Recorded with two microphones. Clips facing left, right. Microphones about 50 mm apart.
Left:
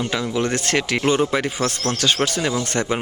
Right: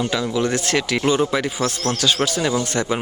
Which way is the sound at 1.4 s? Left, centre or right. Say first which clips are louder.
Even; left.